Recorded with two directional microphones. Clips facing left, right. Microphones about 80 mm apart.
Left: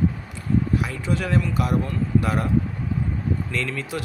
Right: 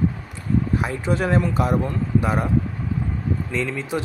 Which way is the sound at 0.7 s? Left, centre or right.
Right.